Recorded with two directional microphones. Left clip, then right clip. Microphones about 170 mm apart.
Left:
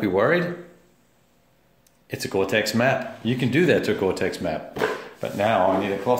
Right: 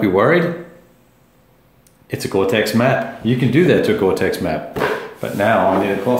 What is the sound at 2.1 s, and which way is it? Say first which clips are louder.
Speech: right 6 dB; 25° left (ahead or behind).